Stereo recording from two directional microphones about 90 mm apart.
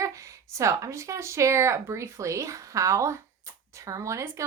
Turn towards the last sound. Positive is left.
turn(degrees=-35)  # may be behind; listen again after turning